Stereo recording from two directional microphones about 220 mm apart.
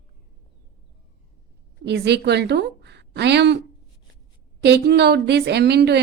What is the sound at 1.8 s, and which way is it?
A woman's voice, 50° right (ahead or behind).